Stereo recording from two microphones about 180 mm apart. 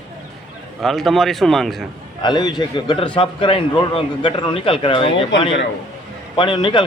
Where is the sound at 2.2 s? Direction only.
25° left (ahead or behind).